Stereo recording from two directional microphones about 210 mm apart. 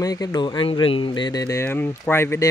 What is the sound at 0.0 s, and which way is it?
Speech, 15° left (ahead or behind).